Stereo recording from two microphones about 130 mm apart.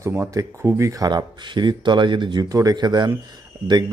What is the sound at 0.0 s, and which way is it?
Speech, 20° right (ahead or behind).